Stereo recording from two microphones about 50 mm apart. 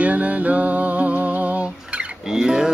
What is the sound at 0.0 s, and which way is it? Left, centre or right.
Music, right.